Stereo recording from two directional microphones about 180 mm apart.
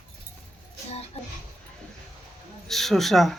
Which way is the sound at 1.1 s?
35° left (ahead or behind).